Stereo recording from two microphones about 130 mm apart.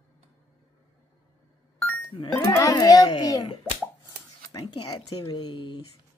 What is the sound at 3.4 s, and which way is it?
Plop, 45° left (ahead or behind).